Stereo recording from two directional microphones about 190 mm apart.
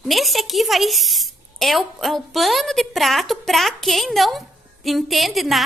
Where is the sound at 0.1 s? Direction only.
Centre (ahead or behind).